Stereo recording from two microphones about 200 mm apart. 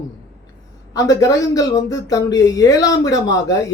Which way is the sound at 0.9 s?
15° left (ahead or behind).